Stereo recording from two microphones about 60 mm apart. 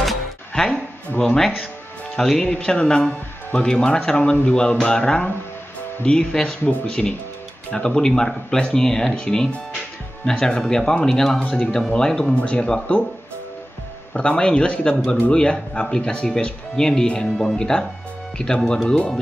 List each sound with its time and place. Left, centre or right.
0.6 s speech: centre
2.5 s speech: centre
7.7 s speech: centre
14.1 s speech: centre